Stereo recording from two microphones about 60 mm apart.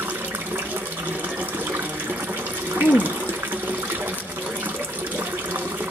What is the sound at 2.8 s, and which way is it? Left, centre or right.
Water, right.